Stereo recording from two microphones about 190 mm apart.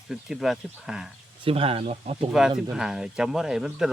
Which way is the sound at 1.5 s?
30° right (ahead or behind).